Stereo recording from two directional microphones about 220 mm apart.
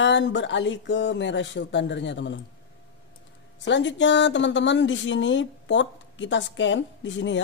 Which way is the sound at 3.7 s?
55° left (ahead or behind).